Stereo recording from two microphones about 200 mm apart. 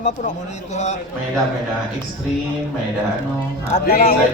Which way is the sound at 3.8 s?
45° left (ahead or behind).